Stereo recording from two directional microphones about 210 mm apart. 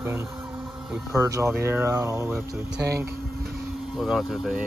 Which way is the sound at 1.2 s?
15° right (ahead or behind).